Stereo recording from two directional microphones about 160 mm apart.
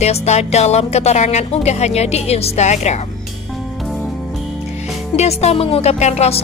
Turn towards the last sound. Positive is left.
turn(degrees=40)  # may be behind; listen again after turning